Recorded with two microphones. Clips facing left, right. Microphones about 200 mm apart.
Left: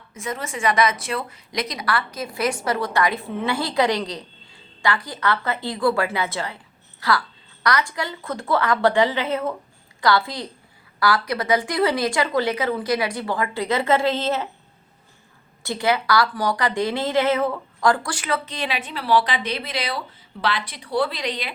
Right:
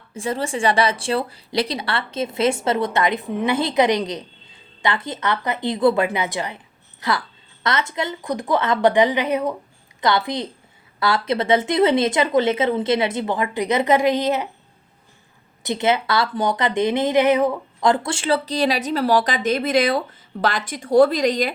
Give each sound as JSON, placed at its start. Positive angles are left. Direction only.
{"t": 0.1, "sound": "a woman's voice", "side_deg": -30}
{"t": 15.6, "sound": "a woman's voice", "side_deg": -20}